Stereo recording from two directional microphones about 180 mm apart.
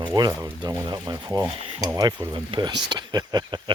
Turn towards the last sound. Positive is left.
turn(degrees=-25)  # may be behind; listen again after turning